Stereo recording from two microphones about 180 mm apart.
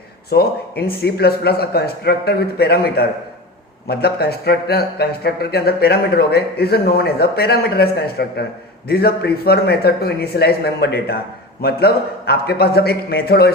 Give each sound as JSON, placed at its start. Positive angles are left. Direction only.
{"t": 0.3, "sound": "speech", "side_deg": 60}